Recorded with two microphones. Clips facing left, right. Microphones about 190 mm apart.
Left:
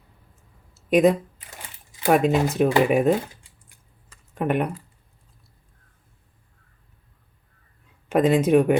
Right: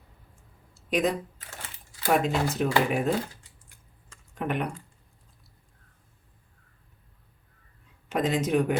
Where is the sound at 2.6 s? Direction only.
60° left (ahead or behind).